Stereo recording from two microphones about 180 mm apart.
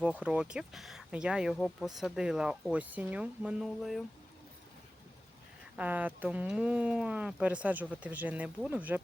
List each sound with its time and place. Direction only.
0.0 s speech: 5° right (ahead or behind)
5.7 s speech: 10° right (ahead or behind)